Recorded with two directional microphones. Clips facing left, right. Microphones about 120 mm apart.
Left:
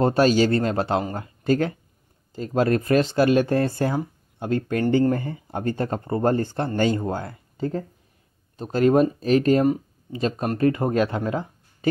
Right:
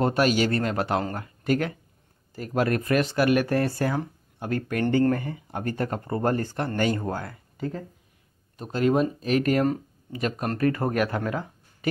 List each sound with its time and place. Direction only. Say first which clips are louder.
0.0 s speech: left 4 dB; 30° left (ahead or behind)
8.7 s speech: left 5 dB; 40° left (ahead or behind); by 11.9 s 25° left (ahead or behind)